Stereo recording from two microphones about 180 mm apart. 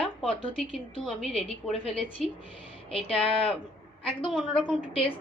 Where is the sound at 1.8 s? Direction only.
35° left (ahead or behind).